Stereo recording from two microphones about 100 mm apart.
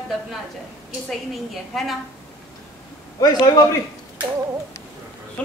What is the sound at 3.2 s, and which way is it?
Speech, 40° left (ahead or behind).